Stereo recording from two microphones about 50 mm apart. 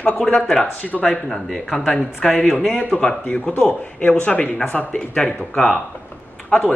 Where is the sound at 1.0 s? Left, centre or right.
Centre.